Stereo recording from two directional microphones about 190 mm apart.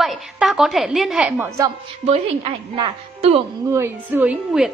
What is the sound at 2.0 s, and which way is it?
A woman's voice, 30° right (ahead or behind).